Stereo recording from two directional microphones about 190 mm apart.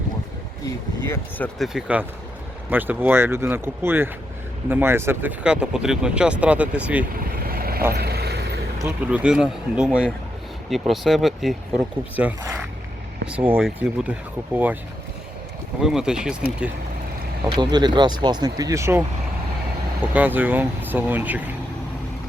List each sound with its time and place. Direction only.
1.0 s speech: 15° left (ahead or behind)
1.5 s speech: centre (ahead or behind)
7.4 s vehicle: 50° right (ahead or behind)
9.0 s speech: 5° right (ahead or behind)
13.3 s speech: 5° right (ahead or behind)
15.8 s speech: 5° right (ahead or behind)
17.4 s speech: 25° right (ahead or behind)
20.1 s speech: 10° right (ahead or behind)